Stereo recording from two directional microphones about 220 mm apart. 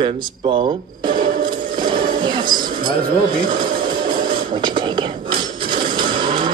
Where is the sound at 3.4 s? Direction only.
20° right (ahead or behind).